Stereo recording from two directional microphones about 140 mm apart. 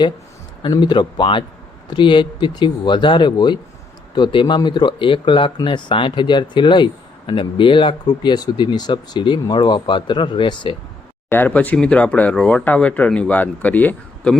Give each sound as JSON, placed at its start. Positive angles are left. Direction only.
{"t": 0.6, "sound": "speech", "side_deg": 30}
{"t": 11.3, "sound": "speech", "side_deg": 15}